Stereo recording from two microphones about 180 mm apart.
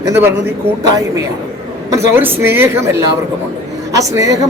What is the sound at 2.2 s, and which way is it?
Speech, 10° right (ahead or behind).